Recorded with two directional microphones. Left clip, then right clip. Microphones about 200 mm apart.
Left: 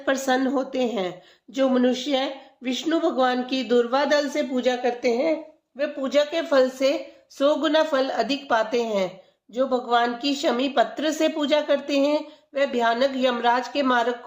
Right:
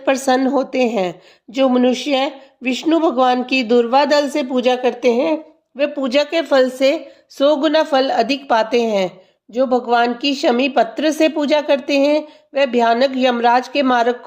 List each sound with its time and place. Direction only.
0.0 s a woman's voice: 35° right (ahead or behind)